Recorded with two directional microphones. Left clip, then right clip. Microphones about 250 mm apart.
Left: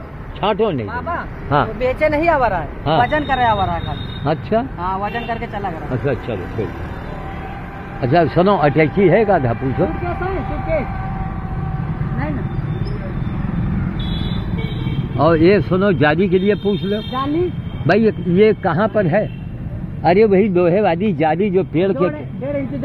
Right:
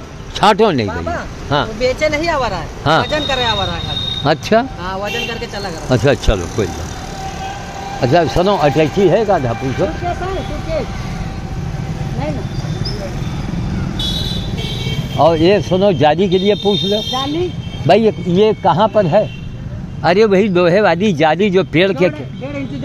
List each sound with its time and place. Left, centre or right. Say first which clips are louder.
0.4 s speech: right 7 dB; right
1.8 s speech: right 1 dB; left
2.8 s speech: right 2 dB; right
3.1 s speech: even; centre
4.2 s speech: right 5 dB; right
6.0 s speech: right 6 dB; right
8.0 s speech: right 2 dB; centre
15.1 s speech: right 2 dB; centre
20.0 s speech: right 1 dB; right